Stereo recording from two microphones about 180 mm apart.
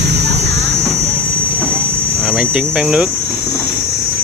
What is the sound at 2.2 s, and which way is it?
Speech, 5° right (ahead or behind).